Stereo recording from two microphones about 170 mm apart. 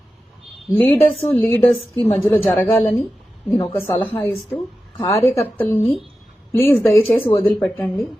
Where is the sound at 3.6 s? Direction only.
10° left (ahead or behind).